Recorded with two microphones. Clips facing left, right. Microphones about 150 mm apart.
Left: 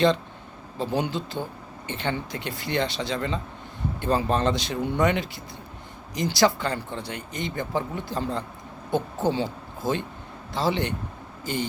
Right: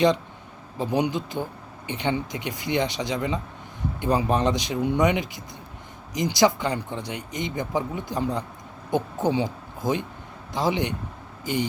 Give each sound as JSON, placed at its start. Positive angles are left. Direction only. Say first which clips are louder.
{"t": 0.8, "sound": "speech", "louder": "right 2 dB", "side_deg": -15}